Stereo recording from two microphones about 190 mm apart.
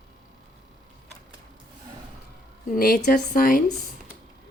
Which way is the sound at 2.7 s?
50° left (ahead or behind).